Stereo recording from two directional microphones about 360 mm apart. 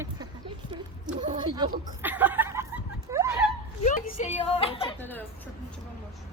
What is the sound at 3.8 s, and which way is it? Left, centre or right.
A woman's voice, centre.